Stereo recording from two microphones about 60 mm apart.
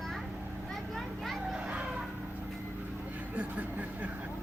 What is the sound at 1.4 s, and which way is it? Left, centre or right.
Children playing, centre.